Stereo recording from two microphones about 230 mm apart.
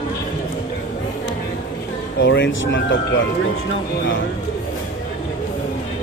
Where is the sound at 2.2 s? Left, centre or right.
Left.